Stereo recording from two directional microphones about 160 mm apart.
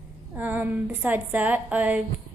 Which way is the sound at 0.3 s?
10° right (ahead or behind).